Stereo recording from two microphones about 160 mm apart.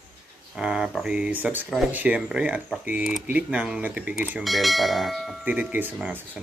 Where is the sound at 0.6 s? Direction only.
5° right (ahead or behind).